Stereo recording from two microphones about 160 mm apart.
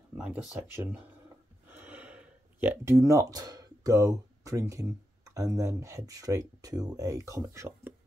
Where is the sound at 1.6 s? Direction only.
10° right (ahead or behind).